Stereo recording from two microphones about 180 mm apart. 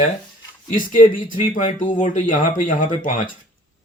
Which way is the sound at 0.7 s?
50° left (ahead or behind).